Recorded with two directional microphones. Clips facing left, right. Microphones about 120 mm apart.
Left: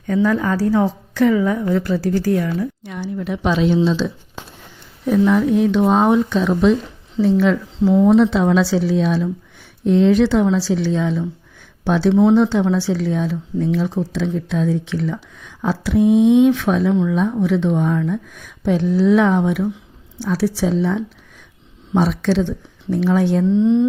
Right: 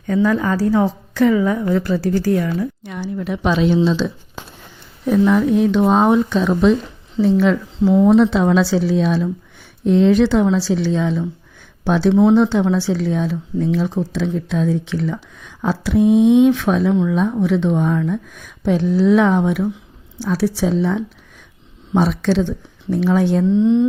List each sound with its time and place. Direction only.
0.1 s speech: 20° right (ahead or behind)
1.1 s a woman's voice: 25° right (ahead or behind)
1.6 s a woman's voice: 35° right (ahead or behind)
2.8 s a woman's voice: 50° right (ahead or behind)
5.0 s speech: 35° right (ahead or behind)
8.1 s a woman's voice: 40° right (ahead or behind); by 14.6 s 15° right (ahead or behind)
14.6 s speech: 25° right (ahead or behind)
16.9 s speech: 15° right (ahead or behind)
20.2 s speech: 15° right (ahead or behind)